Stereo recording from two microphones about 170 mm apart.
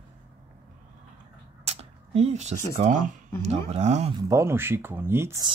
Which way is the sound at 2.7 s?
50° right (ahead or behind).